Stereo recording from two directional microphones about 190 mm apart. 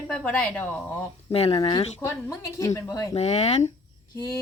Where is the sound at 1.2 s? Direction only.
30° left (ahead or behind).